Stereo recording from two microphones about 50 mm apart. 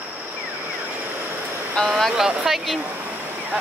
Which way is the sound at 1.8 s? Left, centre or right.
Left.